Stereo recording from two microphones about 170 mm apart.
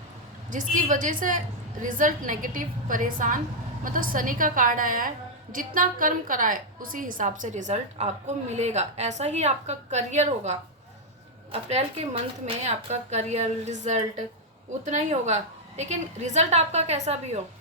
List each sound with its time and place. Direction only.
0.5 s a woman's voice: 50° right (ahead or behind)